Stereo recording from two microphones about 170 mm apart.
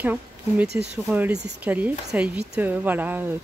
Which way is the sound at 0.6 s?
80° right.